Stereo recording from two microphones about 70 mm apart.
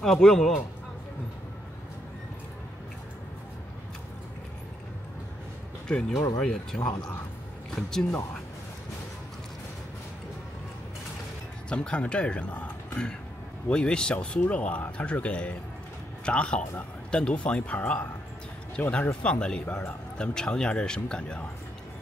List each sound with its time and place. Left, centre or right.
0.0 s a man's voice: centre
5.9 s speech: centre
6.1 s speech: left
6.4 s speech: centre
11.7 s speech: centre